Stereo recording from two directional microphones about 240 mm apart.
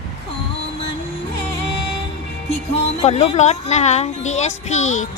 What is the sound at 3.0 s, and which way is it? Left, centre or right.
A woman's voice, left.